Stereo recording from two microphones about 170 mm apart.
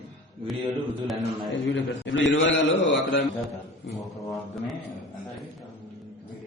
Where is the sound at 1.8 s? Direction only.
90° left.